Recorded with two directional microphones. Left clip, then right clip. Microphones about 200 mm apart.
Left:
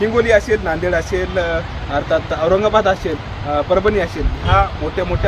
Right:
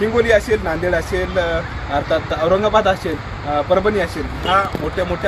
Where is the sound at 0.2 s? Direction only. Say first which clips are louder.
Left 1 dB; 10° right (ahead or behind).